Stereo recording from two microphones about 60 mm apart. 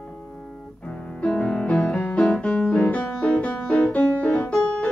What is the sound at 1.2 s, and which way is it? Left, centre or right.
Music, centre.